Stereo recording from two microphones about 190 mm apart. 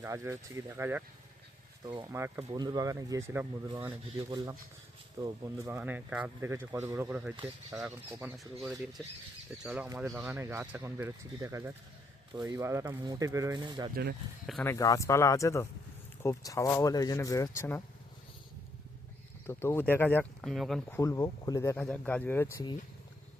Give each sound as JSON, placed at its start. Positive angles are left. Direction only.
{"t": 0.0, "sound": "speech", "side_deg": -15}
{"t": 1.8, "sound": "speech", "side_deg": -25}
{"t": 13.9, "sound": "speech", "side_deg": -55}
{"t": 14.6, "sound": "speech", "side_deg": 15}
{"t": 19.5, "sound": "speech", "side_deg": 10}
{"t": 20.9, "sound": "speech", "side_deg": 15}